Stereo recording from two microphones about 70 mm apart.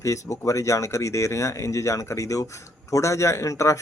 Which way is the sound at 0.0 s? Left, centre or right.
Left.